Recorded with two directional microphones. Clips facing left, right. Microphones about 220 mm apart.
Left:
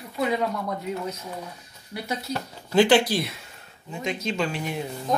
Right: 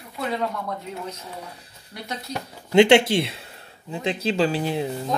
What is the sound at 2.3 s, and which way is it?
Speech, 25° right (ahead or behind).